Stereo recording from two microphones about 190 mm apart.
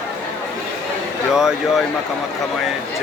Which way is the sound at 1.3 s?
5° right (ahead or behind).